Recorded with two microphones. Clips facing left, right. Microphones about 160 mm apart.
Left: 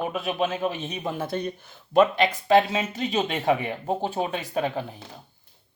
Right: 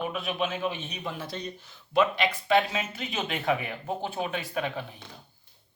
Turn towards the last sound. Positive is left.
turn(degrees=35)  # may be behind; listen again after turning